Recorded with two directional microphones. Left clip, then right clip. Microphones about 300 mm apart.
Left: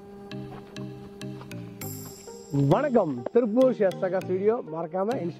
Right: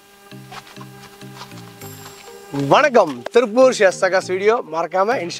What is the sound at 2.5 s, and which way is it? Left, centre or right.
Speech, centre.